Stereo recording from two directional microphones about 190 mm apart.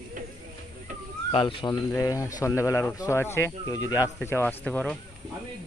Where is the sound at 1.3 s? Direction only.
25° left (ahead or behind); by 4.9 s 5° left (ahead or behind).